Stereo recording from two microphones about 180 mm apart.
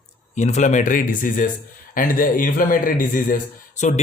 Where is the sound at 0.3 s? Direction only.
40° left (ahead or behind).